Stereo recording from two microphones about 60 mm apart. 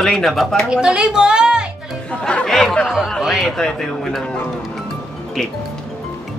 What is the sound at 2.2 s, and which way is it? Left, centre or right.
Speech, centre.